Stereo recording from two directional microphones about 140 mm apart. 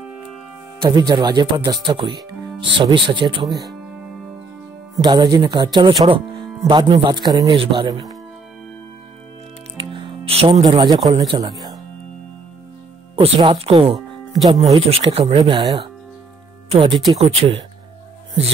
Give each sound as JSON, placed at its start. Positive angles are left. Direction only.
{"t": 0.0, "sound": "music", "side_deg": -5}
{"t": 0.7, "sound": "speech", "side_deg": -30}
{"t": 3.8, "sound": "music", "side_deg": -5}
{"t": 5.0, "sound": "speech", "side_deg": -30}
{"t": 9.8, "sound": "music", "side_deg": -40}
{"t": 11.1, "sound": "speech", "side_deg": -40}
{"t": 13.1, "sound": "speech", "side_deg": -40}
{"t": 13.9, "sound": "music", "side_deg": 0}
{"t": 14.9, "sound": "speech", "side_deg": -45}